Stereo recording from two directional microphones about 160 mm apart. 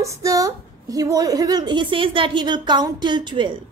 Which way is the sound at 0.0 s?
20° right (ahead or behind).